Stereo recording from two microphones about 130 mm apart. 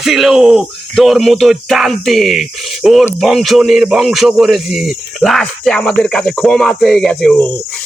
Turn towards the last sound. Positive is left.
turn(degrees=0)  # may be behind; listen again after turning